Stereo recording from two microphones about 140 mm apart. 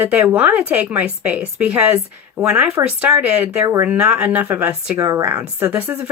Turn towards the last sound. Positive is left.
turn(degrees=-15)  # may be behind; listen again after turning